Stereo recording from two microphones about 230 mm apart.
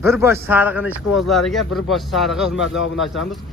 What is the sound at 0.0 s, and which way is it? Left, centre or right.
A man's voice, centre.